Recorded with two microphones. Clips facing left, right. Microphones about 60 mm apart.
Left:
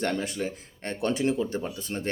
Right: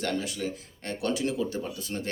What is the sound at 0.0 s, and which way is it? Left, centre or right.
Speech, left.